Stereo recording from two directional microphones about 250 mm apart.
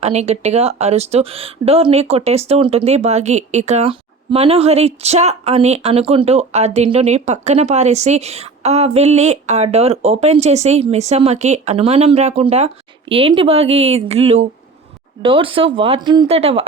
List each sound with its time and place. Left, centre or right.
0.0 s speech: right